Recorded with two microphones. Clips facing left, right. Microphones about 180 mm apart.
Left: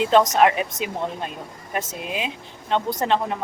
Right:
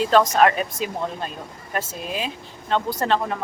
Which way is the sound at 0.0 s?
20° left (ahead or behind).